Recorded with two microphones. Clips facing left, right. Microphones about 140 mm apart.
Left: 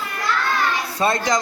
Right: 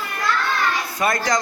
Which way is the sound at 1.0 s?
25° left (ahead or behind).